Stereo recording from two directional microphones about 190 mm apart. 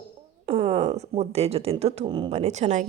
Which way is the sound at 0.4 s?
30° right (ahead or behind).